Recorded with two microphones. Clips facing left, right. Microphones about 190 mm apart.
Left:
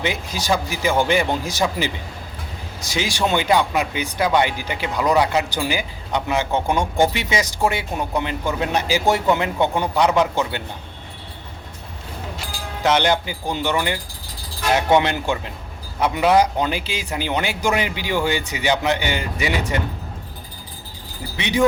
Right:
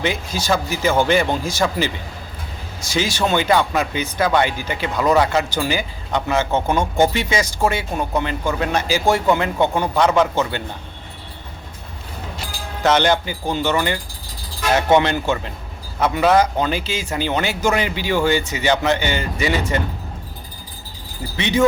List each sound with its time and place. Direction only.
0.0 s speech: 15° left (ahead or behind)
12.8 s speech: 15° left (ahead or behind)
21.3 s speech: 15° left (ahead or behind)